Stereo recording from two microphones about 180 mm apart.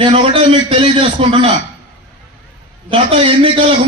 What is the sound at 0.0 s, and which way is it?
A man's voice, 30° right (ahead or behind).